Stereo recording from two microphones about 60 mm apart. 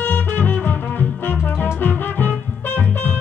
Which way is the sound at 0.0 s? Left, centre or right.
Left.